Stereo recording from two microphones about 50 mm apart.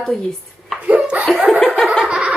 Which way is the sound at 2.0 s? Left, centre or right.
Centre.